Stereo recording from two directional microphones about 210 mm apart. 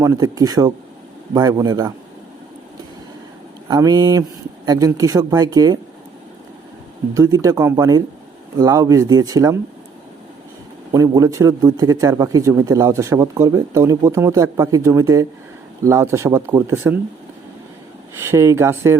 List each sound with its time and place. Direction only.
0.0 s a man's voice: 15° right (ahead or behind)
3.7 s a man's voice: 20° right (ahead or behind)
7.1 s a man's voice: 15° right (ahead or behind)
10.9 s a man's voice: 15° right (ahead or behind)
18.2 s a man's voice: 10° right (ahead or behind)